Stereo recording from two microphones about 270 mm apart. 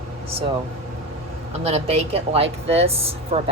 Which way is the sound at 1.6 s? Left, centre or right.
Right.